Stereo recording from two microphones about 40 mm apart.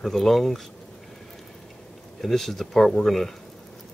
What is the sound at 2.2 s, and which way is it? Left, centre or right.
Speech, centre.